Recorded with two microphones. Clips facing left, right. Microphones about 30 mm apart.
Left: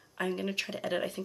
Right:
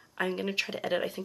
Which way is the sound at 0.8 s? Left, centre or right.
Centre.